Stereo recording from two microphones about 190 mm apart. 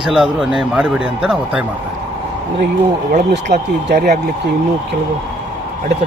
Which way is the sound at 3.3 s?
55° right (ahead or behind).